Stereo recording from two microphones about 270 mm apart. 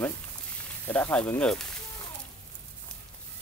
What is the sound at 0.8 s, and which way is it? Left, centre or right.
Speech, centre.